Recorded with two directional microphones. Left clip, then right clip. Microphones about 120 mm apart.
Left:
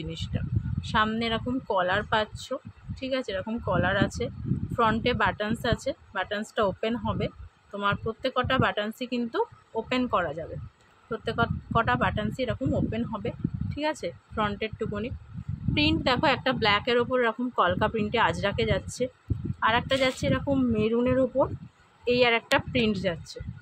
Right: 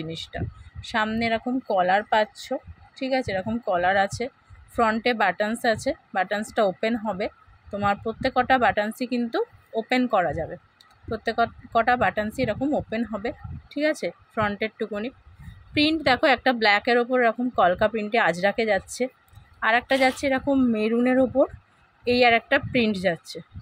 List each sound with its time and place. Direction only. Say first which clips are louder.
0.0 s a woman's voice: right 4 dB; 25° right (ahead or behind)